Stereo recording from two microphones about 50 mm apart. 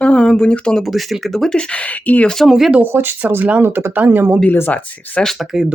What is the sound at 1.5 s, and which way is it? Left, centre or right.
Speech, left.